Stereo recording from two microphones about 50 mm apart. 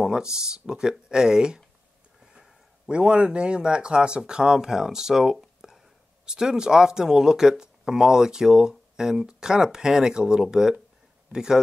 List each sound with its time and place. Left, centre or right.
0.0 s speech: centre